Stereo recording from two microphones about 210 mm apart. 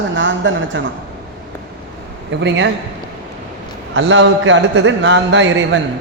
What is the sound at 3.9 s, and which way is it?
Speech, 60° right (ahead or behind).